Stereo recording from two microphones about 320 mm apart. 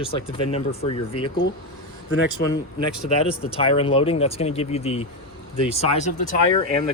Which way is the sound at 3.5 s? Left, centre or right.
Centre.